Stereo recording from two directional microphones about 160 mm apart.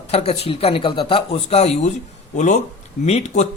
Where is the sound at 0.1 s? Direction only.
40° left (ahead or behind).